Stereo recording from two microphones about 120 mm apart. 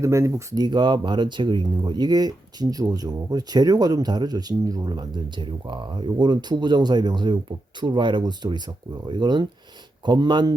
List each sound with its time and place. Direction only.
0.0 s speech: 25° right (ahead or behind)